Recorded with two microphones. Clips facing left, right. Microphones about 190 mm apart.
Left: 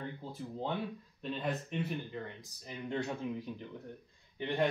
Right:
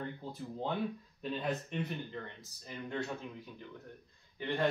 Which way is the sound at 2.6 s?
20° left (ahead or behind).